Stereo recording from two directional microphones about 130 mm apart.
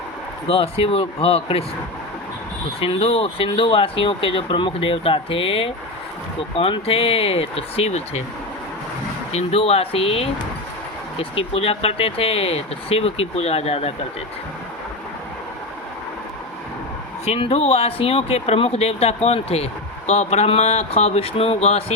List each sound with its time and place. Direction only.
0.4 s speech: 45° left (ahead or behind)
2.8 s speech: 45° left (ahead or behind)
9.3 s speech: 50° left (ahead or behind)
17.2 s speech: 50° left (ahead or behind)